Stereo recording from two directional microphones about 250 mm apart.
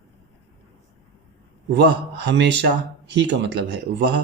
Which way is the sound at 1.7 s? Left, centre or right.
Right.